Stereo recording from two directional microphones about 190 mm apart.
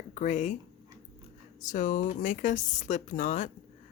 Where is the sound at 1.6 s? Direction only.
40° left (ahead or behind).